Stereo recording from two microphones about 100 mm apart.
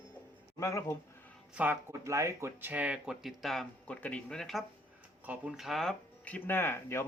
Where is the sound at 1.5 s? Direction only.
15° right (ahead or behind).